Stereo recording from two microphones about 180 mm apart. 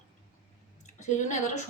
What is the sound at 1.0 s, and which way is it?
Speech, 40° left (ahead or behind).